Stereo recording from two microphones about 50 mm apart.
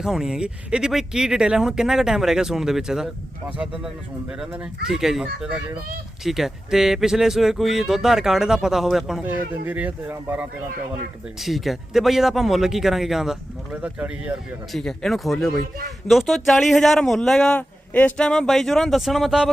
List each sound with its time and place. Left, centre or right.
0.0 s speech: centre
4.9 s speech: centre
9.2 s speech: right
11.3 s a man's voice: centre
13.8 s speech: right
14.7 s a man's voice: centre
17.5 s a man's voice: left
18.2 s a man's voice: centre